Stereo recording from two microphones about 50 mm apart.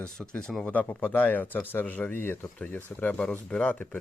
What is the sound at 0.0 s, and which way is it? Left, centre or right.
Speech, centre.